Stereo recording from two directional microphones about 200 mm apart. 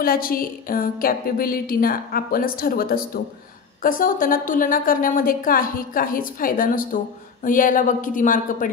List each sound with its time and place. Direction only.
0.0 s a woman's voice: 45° left (ahead or behind)